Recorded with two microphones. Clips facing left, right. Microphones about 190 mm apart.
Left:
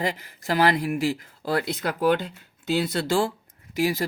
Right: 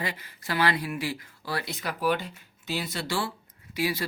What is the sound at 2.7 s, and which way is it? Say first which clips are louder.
Speech: left 8 dB; 45° left (ahead or behind).